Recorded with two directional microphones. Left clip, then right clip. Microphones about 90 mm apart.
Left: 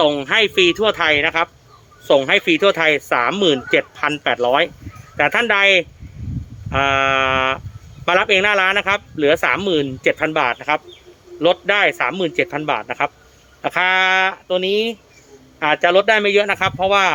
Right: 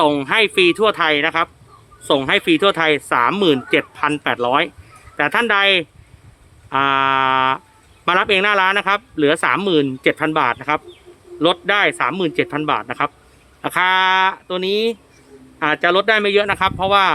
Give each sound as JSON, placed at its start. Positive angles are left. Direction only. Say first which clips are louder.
{"t": 0.0, "sound": "speech", "louder": "even", "side_deg": -55}